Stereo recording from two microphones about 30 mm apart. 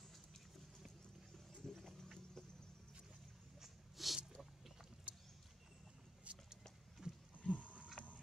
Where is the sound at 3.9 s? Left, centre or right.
Centre.